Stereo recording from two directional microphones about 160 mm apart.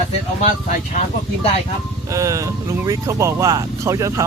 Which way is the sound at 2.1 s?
20° right (ahead or behind).